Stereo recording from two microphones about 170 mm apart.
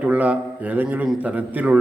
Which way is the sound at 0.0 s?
10° right (ahead or behind).